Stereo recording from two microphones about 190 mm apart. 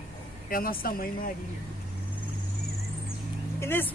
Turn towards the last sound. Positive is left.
turn(degrees=10)  # may be behind; listen again after turning